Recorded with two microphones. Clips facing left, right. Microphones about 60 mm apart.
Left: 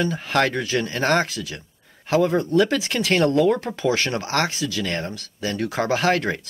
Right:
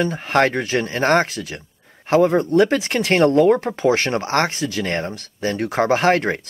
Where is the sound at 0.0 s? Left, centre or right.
Right.